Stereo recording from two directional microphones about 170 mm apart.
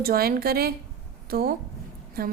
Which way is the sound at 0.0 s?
60° right (ahead or behind).